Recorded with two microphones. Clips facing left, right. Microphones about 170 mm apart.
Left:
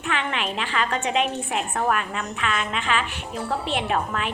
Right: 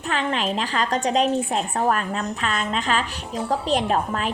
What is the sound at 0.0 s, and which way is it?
A woman's voice, 35° right (ahead or behind).